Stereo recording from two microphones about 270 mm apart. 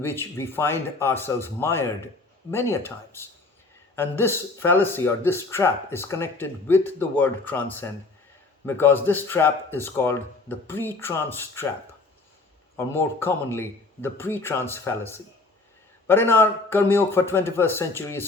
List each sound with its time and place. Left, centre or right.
0.0 s speech: centre
12.7 s speech: centre